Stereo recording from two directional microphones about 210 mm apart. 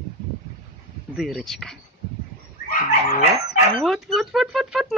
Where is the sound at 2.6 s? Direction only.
40° left (ahead or behind).